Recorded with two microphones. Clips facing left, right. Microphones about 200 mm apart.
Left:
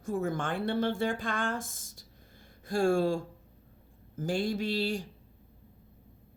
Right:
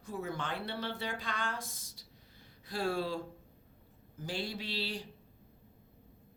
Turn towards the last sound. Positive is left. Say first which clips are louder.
# left 8 dB
turn(degrees=45)  # may be behind; listen again after turning